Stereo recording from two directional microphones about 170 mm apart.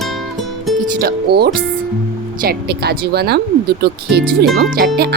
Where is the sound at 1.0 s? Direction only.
65° right (ahead or behind).